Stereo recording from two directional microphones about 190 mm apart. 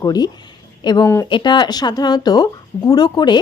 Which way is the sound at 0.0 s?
20° left (ahead or behind).